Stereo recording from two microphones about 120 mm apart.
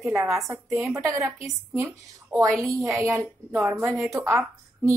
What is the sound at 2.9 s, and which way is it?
A woman's voice, 20° right (ahead or behind).